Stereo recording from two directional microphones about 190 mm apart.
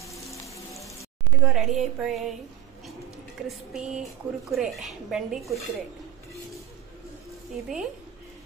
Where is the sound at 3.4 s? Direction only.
5° right (ahead or behind).